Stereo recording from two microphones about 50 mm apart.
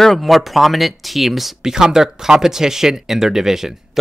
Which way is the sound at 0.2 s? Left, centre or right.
Centre.